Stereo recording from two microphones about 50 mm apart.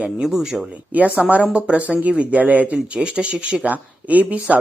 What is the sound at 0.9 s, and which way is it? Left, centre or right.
Speech, right.